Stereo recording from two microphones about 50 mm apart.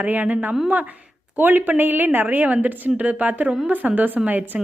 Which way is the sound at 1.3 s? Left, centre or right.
Right.